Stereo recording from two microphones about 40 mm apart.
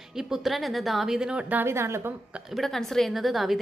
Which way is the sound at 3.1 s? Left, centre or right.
Centre.